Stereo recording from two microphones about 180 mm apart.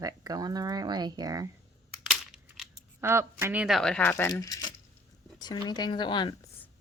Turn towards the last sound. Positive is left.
turn(degrees=25)  # may be behind; listen again after turning